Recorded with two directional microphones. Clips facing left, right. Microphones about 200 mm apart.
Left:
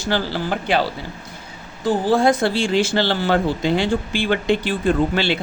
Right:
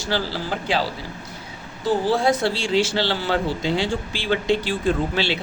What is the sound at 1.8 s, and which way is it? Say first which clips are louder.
Speech: left 3 dB; 50° left (ahead or behind).